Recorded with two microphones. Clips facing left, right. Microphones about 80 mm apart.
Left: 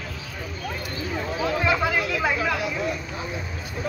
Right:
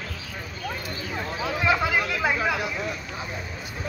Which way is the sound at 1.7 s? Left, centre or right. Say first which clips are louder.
Right 3 dB; centre.